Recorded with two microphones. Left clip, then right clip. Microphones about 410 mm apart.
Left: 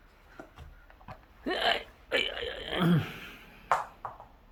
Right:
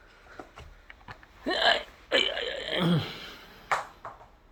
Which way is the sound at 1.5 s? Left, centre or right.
Centre.